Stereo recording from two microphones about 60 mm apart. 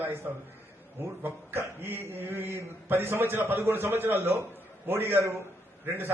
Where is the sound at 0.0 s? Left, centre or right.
Right.